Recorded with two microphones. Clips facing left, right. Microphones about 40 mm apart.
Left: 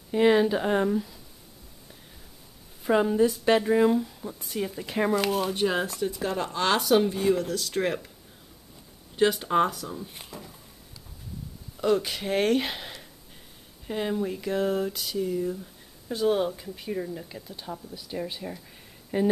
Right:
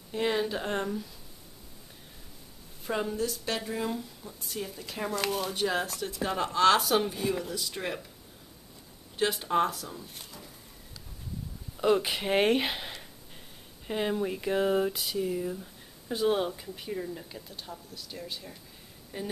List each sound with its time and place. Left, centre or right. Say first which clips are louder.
0.1 s speech: left 8 dB; centre
2.9 s speech: left 9 dB; centre
5.1 s speech: left 5 dB; centre
7.3 s speech: left 5 dB; centre
7.7 s speech: left 8 dB; centre
9.5 s speech: left 3 dB; centre
11.7 s speech: left 1 dB; centre
17.6 s speech: left 6 dB; centre
18.2 s speech: left 7 dB; left